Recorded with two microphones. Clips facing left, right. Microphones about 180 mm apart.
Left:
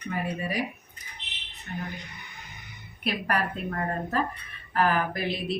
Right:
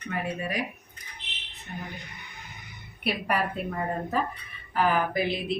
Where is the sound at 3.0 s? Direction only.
5° right (ahead or behind).